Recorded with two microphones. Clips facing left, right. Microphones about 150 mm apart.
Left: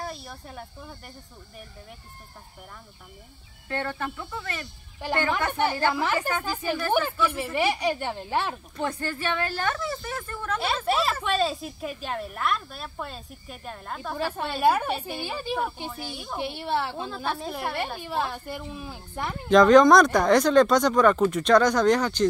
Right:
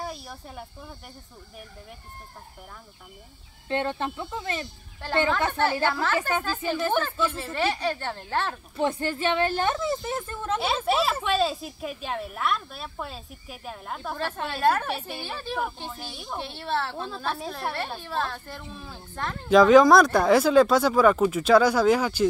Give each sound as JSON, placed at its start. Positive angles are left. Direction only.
{"t": 0.0, "sound": "snake", "side_deg": 0}
{"t": 3.6, "sound": "a woman's voice", "side_deg": -20}
{"t": 5.0, "sound": "a woman's voice", "side_deg": 15}
{"t": 8.8, "sound": "a woman's voice", "side_deg": -20}
{"t": 10.9, "sound": "a woman's voice", "side_deg": 0}
{"t": 14.1, "sound": "a woman's voice", "side_deg": 10}
{"t": 19.5, "sound": "a woman's voice", "side_deg": -5}